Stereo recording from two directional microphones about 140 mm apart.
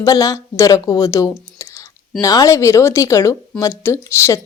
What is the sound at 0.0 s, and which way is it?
Speech, 25° left (ahead or behind).